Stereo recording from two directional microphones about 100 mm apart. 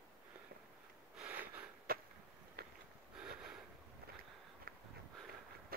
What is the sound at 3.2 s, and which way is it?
Sniff, 5° right (ahead or behind).